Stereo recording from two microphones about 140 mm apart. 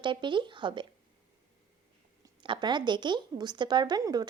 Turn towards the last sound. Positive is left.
turn(degrees=-25)  # may be behind; listen again after turning